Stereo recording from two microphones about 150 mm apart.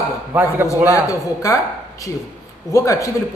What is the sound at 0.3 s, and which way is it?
Speech, 15° right (ahead or behind).